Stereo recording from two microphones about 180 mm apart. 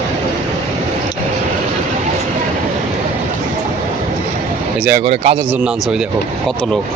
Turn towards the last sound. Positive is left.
turn(degrees=-35)  # may be behind; listen again after turning